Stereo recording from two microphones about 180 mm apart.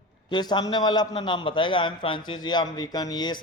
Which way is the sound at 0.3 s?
25° left (ahead or behind).